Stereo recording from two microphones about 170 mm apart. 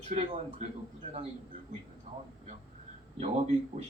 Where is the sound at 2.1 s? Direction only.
35° right (ahead or behind).